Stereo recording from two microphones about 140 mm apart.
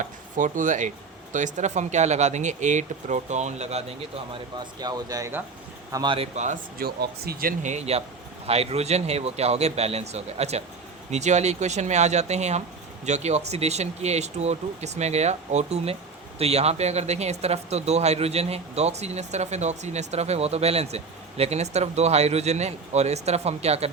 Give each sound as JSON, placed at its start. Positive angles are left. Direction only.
{"t": 0.0, "sound": "speech", "side_deg": -65}
{"t": 4.6, "sound": "speech", "side_deg": -30}
{"t": 6.3, "sound": "speech", "side_deg": -60}